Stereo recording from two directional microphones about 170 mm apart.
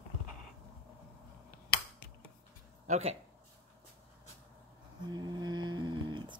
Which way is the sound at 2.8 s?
40° right (ahead or behind).